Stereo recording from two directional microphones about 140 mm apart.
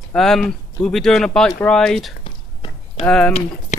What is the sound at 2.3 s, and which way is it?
Whispering, 40° left (ahead or behind).